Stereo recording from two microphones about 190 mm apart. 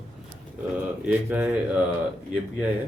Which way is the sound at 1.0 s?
10° right (ahead or behind).